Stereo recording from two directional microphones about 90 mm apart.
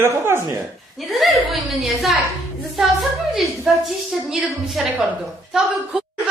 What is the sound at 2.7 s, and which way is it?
A woman's voice, centre (ahead or behind).